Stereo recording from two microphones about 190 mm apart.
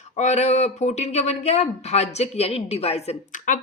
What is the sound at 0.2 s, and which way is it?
A woman's voice, 35° left (ahead or behind).